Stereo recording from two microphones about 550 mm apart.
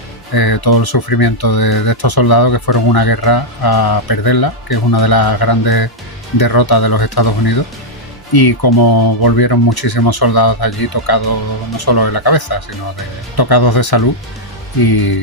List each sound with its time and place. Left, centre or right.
0.3 s speech: left